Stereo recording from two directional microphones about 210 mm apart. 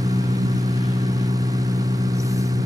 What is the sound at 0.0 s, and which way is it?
Vehicle, 15° right (ahead or behind).